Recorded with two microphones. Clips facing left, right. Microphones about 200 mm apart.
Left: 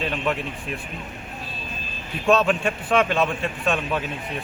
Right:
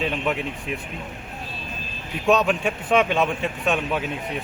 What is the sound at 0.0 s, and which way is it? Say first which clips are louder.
Speech: right 1 dB; 15° right (ahead or behind).